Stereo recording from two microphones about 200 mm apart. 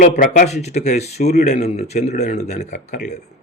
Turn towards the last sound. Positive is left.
turn(degrees=35)  # may be behind; listen again after turning